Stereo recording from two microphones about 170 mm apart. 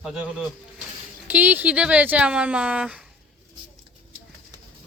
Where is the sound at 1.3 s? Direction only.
10° right (ahead or behind).